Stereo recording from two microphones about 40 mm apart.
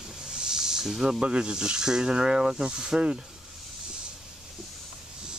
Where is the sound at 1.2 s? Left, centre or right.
Right.